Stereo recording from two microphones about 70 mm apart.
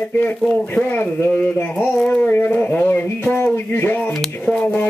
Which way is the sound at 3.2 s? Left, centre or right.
Left.